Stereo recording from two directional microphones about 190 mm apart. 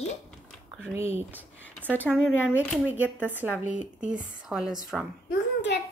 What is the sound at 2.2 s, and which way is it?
Speech, 5° right (ahead or behind).